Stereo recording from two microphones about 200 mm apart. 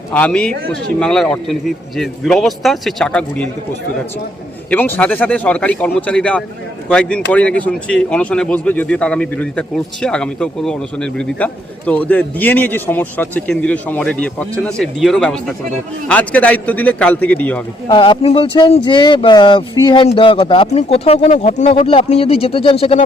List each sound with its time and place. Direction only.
0.1 s a man's voice: 5° left (ahead or behind)
4.7 s a man's voice: 10° left (ahead or behind)
17.8 s speech: 25° left (ahead or behind)